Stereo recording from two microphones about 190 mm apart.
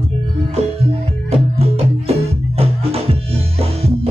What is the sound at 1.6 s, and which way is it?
Music, 30° right (ahead or behind).